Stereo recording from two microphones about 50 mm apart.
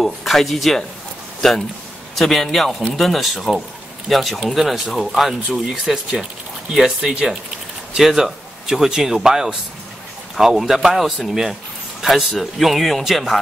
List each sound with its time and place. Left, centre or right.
0.0 s a man's voice: centre
7.0 s a man's voice: centre